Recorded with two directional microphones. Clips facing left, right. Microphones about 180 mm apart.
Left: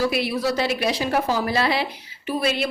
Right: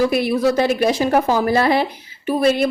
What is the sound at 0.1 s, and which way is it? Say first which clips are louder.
A woman's voice: right 6 dB; 50° right (ahead or behind).